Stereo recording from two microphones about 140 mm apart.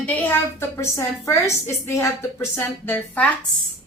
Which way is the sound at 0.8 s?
20° left (ahead or behind).